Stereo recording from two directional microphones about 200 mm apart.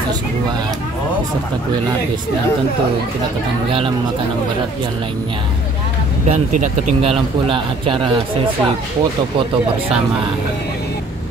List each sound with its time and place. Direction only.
6.2 s a man's voice: 35° right (ahead or behind)